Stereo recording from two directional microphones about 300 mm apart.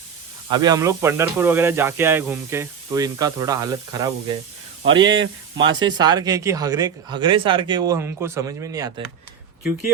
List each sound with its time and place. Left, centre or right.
0.5 s speech: centre
4.8 s speech: right
5.7 s speech: centre